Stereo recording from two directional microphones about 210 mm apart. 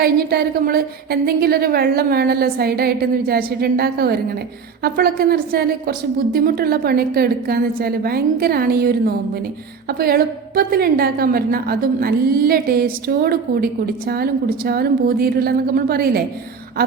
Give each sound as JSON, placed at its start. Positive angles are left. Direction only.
{"t": 0.0, "sound": "a woman's voice", "side_deg": -45}